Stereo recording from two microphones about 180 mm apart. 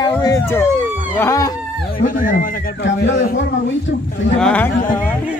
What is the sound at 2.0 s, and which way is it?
A man's voice, 45° left (ahead or behind).